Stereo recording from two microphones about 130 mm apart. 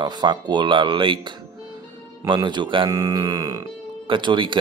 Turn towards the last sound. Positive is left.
turn(degrees=-40)  # may be behind; listen again after turning